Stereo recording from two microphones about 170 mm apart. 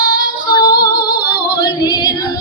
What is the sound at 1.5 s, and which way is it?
Yodeling, 25° left (ahead or behind).